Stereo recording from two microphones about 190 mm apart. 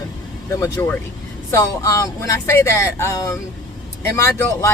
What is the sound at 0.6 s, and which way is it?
Speech, 10° left (ahead or behind).